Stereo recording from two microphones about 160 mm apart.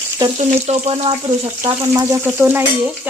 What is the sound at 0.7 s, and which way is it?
Speech, 40° right (ahead or behind).